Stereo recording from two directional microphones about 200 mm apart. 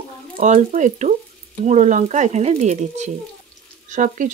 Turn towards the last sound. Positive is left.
turn(degrees=-40)  # may be behind; listen again after turning